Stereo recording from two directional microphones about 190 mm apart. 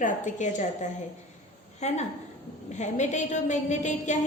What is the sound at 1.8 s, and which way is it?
A woman's voice, 35° left (ahead or behind).